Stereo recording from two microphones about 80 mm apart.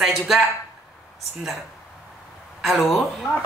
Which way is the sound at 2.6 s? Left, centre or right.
Centre.